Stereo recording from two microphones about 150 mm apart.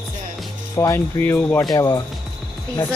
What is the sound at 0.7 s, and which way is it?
Speech, 20° left (ahead or behind).